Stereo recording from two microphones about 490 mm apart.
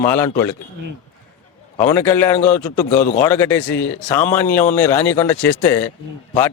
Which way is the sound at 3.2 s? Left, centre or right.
Centre.